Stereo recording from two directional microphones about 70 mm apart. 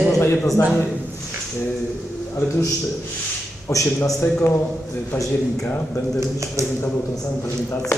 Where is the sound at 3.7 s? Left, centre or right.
Left.